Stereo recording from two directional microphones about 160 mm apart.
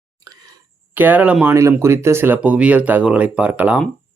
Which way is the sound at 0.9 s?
10° right (ahead or behind).